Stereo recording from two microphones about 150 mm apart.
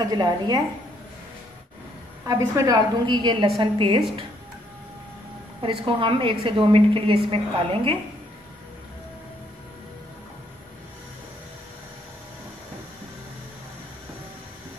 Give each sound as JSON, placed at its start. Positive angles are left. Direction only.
{"t": 0.0, "sound": "a woman's voice", "side_deg": -25}
{"t": 2.2, "sound": "a woman's voice", "side_deg": -20}
{"t": 5.6, "sound": "a woman's voice", "side_deg": -35}